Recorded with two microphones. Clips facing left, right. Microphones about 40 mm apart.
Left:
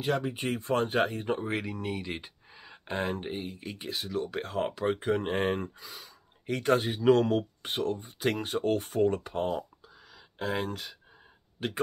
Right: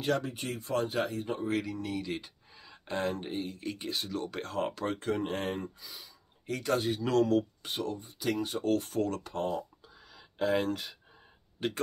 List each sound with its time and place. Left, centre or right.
0.0 s speech: centre
0.5 s speech: left; by 11.0 s centre